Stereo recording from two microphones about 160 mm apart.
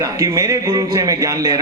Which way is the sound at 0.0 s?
20° right (ahead or behind).